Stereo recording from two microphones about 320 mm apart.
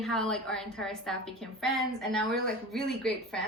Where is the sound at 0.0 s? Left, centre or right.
Centre.